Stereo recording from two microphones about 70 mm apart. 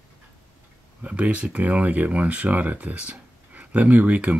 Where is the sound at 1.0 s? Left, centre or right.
Centre.